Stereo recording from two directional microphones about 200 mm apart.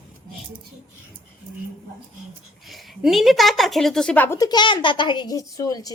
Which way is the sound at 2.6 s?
Centre (ahead or behind).